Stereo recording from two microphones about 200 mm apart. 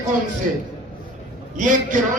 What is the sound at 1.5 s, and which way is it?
Speech, 40° right (ahead or behind).